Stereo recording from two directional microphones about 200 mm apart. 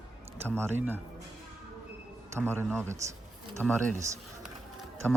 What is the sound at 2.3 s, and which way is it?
Speech, 10° right (ahead or behind).